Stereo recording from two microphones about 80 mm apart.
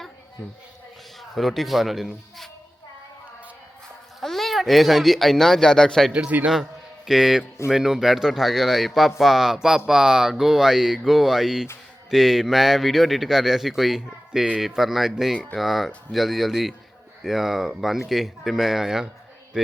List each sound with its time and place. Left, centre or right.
1.2 s speech: centre
4.2 s speech: centre
6.1 s speech: centre
6.5 s a man's voice: centre